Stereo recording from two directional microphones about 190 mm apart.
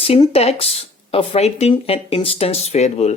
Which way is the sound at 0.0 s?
30° left (ahead or behind).